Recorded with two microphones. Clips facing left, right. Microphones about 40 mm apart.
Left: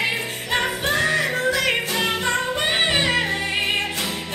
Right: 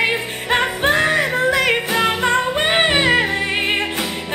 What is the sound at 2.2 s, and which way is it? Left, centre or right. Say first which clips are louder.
Music: right 5 dB; right.